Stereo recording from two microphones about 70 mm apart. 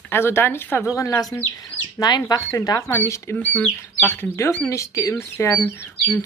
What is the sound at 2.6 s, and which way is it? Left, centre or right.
Speech, left.